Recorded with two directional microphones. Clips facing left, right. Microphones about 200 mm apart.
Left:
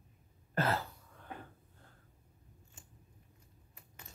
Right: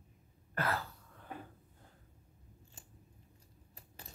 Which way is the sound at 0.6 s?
25° left (ahead or behind).